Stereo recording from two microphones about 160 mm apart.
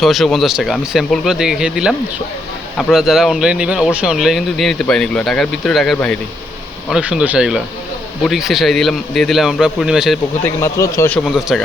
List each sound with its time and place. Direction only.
0.0 s speech: centre (ahead or behind)
10.4 s speech: 20° left (ahead or behind)
11.2 s speech: centre (ahead or behind)